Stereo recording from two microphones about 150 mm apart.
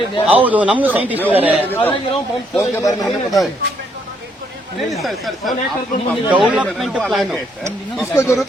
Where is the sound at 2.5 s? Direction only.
25° left (ahead or behind).